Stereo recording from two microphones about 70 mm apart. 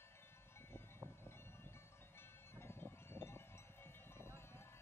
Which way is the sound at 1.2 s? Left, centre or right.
Left.